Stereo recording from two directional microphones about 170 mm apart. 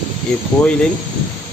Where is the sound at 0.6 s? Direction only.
5° left (ahead or behind).